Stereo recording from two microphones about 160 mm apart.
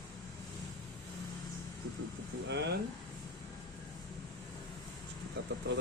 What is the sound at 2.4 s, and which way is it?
Speech, 90° right.